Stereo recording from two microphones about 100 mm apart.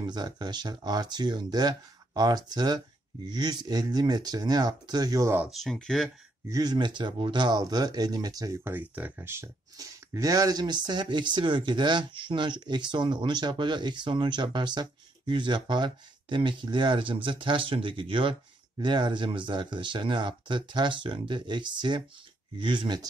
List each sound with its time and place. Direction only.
0.0 s speech: 45° right (ahead or behind)
5.5 s speech: 5° left (ahead or behind)
6.5 s speech: 40° right (ahead or behind)
8.6 s speech: 15° right (ahead or behind)
9.8 s speech: 35° right (ahead or behind)